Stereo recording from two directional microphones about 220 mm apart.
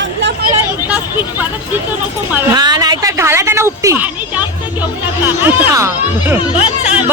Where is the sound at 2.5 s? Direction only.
20° right (ahead or behind).